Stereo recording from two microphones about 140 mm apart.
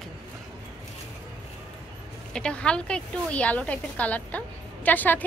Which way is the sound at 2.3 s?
5° left (ahead or behind).